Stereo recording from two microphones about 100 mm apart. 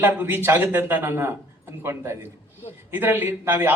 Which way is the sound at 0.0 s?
20° right (ahead or behind).